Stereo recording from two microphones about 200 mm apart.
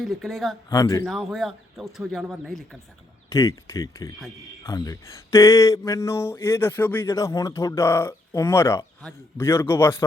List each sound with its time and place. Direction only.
0.0 s speech: centre (ahead or behind)
0.7 s speech: 15° left (ahead or behind)
1.0 s speech: centre (ahead or behind)
3.2 s speech: 15° left (ahead or behind)